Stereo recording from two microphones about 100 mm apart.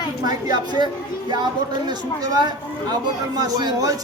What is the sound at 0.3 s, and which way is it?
Speech, 40° right (ahead or behind).